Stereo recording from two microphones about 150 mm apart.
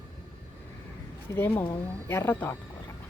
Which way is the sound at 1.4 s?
15° left (ahead or behind).